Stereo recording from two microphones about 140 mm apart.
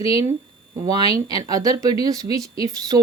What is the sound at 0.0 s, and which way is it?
Speech, 25° right (ahead or behind).